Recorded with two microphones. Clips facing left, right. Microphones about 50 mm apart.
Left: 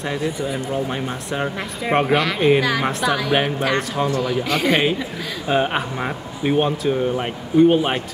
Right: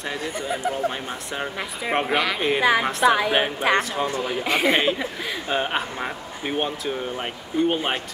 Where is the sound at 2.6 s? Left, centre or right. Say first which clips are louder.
Right 2 dB; right.